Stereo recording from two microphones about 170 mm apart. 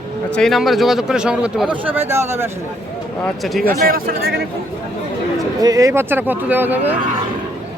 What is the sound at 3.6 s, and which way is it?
Speech, 60° right (ahead or behind).